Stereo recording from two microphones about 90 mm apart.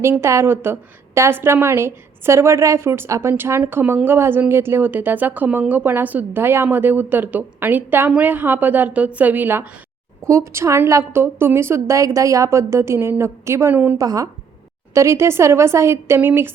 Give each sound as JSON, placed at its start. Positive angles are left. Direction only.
{"t": 0.0, "sound": "a woman's voice", "side_deg": -30}
{"t": 10.2, "sound": "a woman's voice", "side_deg": -30}
{"t": 14.0, "sound": "speech", "side_deg": -40}
{"t": 14.9, "sound": "a woman's voice", "side_deg": -30}